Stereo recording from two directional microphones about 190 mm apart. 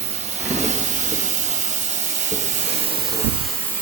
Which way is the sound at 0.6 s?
40° right (ahead or behind).